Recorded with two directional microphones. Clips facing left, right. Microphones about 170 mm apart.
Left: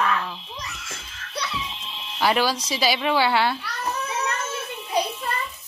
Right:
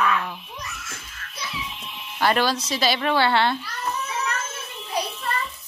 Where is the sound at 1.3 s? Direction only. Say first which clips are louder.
Left 5 dB; 70° left (ahead or behind).